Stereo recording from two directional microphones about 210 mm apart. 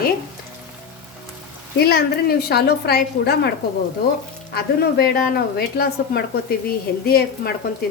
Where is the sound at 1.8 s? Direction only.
50° left (ahead or behind).